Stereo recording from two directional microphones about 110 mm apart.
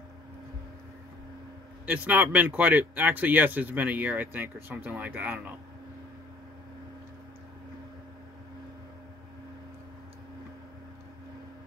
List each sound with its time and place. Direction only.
1.9 s speech: 15° right (ahead or behind)